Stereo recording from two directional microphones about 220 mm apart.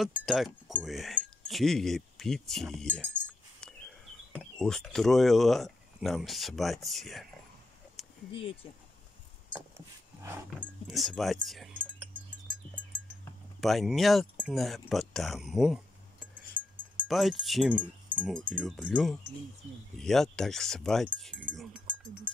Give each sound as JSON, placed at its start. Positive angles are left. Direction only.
{"t": 0.0, "sound": "speech", "side_deg": 0}
{"t": 3.6, "sound": "a sound", "side_deg": 5}
{"t": 4.3, "sound": "speech", "side_deg": 0}
{"t": 8.3, "sound": "speech", "side_deg": 25}
{"t": 10.2, "sound": "speech", "side_deg": -5}
{"t": 13.6, "sound": "speech", "side_deg": 0}
{"t": 17.1, "sound": "speech", "side_deg": 0}